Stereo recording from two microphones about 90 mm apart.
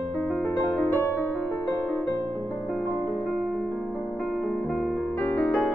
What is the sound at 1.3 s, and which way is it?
Music, 5° left (ahead or behind).